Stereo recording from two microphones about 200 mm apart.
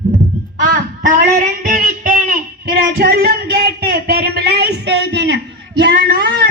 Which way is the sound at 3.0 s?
55° right (ahead or behind).